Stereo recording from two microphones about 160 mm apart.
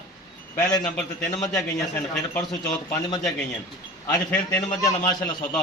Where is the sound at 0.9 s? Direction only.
5° left (ahead or behind).